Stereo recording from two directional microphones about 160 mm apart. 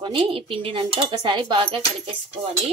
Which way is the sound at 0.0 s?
35° right (ahead or behind).